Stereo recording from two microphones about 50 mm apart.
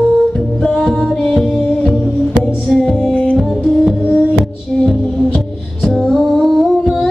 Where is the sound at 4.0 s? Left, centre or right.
Right.